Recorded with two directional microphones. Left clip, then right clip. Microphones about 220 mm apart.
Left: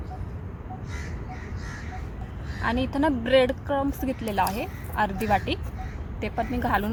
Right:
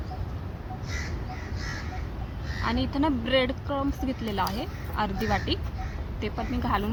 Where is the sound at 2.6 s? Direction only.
35° left (ahead or behind).